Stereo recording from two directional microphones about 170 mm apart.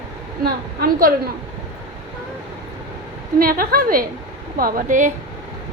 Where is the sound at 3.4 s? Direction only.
60° right (ahead or behind).